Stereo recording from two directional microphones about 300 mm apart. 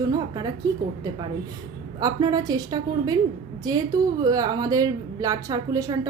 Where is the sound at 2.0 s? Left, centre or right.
Centre.